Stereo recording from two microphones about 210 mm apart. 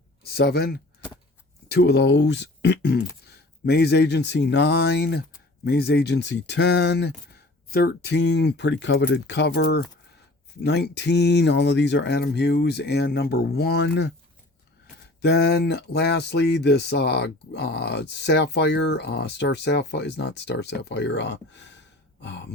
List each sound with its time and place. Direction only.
0.2 s speech: 50° left (ahead or behind)
15.2 s speech: 50° left (ahead or behind)
22.2 s throat clearing: 55° left (ahead or behind)